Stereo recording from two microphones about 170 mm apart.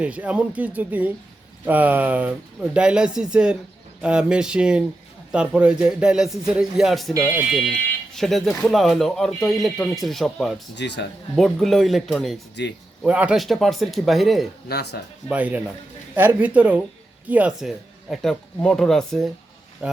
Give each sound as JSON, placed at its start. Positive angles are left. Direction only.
{"t": 0.0, "sound": "speech", "side_deg": -5}
{"t": 10.8, "sound": "a man's voice", "side_deg": 90}
{"t": 11.3, "sound": "speech", "side_deg": 0}
{"t": 12.6, "sound": "speech", "side_deg": 85}
{"t": 13.0, "sound": "speech", "side_deg": -5}
{"t": 14.7, "sound": "speech", "side_deg": 70}
{"t": 15.3, "sound": "speech", "side_deg": -10}
{"t": 19.8, "sound": "speech", "side_deg": -10}